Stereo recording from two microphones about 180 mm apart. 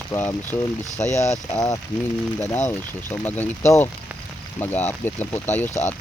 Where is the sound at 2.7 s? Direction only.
10° left (ahead or behind).